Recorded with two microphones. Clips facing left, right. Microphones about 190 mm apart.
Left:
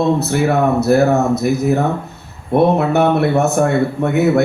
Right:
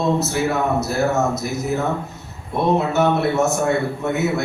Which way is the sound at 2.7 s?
60° left (ahead or behind).